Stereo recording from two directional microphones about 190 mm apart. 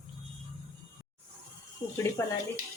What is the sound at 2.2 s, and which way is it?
Speech, 15° left (ahead or behind).